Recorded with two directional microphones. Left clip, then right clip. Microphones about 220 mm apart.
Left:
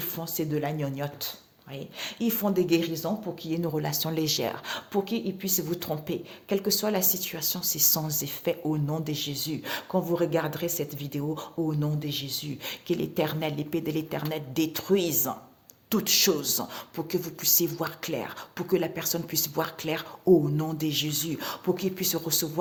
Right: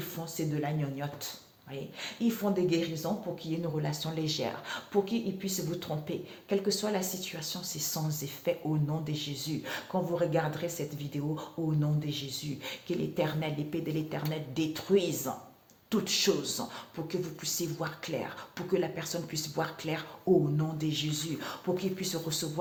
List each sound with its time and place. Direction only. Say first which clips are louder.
0.0 s speech: left 4 dB; 50° left (ahead or behind)